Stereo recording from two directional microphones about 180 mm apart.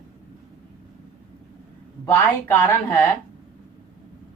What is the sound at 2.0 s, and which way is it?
Speech, 10° left (ahead or behind).